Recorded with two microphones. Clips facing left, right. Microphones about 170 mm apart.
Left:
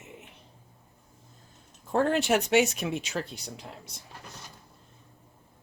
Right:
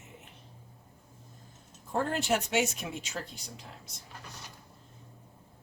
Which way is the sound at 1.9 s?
70° left (ahead or behind).